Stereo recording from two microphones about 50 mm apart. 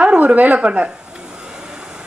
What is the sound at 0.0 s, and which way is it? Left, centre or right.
Speech, right.